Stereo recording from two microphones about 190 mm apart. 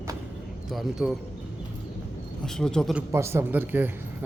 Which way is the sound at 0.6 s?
Centre (ahead or behind).